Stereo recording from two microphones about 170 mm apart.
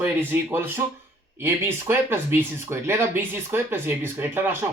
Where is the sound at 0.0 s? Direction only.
10° right (ahead or behind).